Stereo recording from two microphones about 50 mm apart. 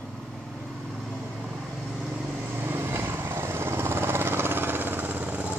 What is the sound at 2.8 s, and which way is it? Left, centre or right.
Vehicle, right.